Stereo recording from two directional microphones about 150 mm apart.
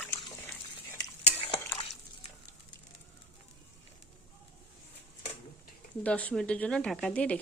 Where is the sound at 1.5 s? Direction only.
20° left (ahead or behind).